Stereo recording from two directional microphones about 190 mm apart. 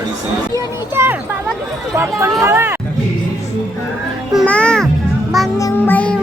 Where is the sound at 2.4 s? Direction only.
15° right (ahead or behind).